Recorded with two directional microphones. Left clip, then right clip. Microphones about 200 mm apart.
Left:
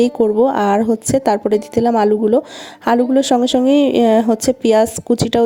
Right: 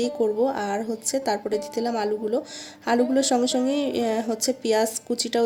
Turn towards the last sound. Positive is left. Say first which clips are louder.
# left 9 dB
turn(degrees=40)  # may be behind; listen again after turning